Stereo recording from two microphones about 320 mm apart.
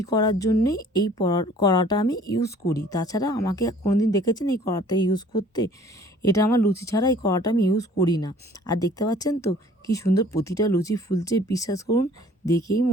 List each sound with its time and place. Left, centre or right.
0.0 s speech: centre